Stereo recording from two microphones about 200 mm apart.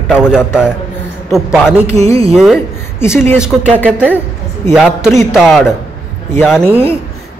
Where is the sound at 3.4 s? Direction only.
5° right (ahead or behind).